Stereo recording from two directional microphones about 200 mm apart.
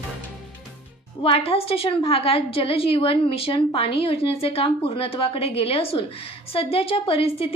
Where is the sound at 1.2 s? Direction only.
30° left (ahead or behind).